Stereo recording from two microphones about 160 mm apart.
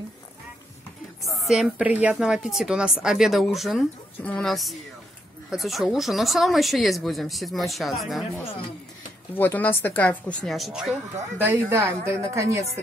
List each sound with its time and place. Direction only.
1.2 s a woman's voice: centre (ahead or behind)
9.3 s a woman's voice: 10° left (ahead or behind); by 11.0 s 5° right (ahead or behind)
11.3 s a woman's voice: 15° right (ahead or behind)